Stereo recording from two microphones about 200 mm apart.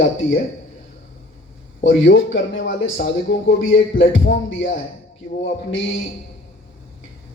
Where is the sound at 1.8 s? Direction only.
65° left (ahead or behind).